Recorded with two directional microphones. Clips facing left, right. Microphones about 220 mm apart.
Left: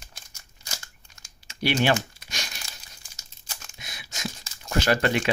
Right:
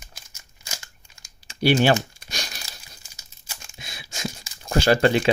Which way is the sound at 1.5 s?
35° right (ahead or behind).